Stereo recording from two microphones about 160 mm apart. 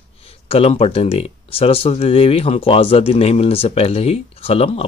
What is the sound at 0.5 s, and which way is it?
Speech, 40° left (ahead or behind).